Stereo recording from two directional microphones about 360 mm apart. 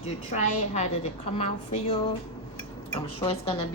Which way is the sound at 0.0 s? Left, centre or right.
Centre.